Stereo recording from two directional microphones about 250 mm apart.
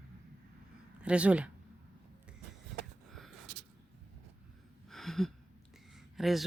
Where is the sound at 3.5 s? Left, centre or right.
Right.